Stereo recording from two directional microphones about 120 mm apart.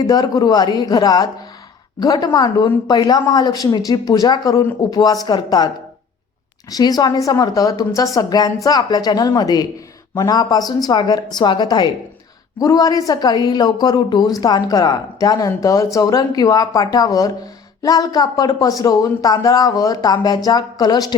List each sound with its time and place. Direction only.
0.0 s a woman's voice: 30° left (ahead or behind)